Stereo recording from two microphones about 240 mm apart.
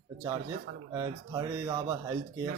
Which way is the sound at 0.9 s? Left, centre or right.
Centre.